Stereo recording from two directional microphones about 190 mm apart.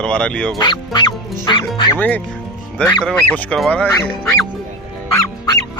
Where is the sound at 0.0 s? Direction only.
5° left (ahead or behind).